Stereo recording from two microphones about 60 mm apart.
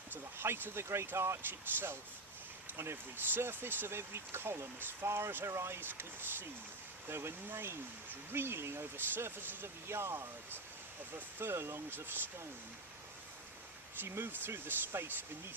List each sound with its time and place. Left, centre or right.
0.1 s speech: right
14.0 s speech: right